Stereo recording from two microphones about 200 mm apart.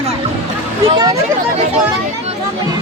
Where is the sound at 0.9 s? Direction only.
25° right (ahead or behind).